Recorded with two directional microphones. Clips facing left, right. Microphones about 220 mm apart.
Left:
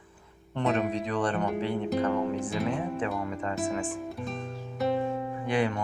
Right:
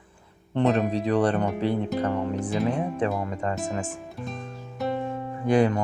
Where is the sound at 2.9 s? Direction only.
40° right (ahead or behind).